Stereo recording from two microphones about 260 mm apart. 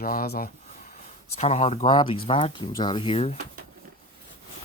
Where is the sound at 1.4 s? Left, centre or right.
Left.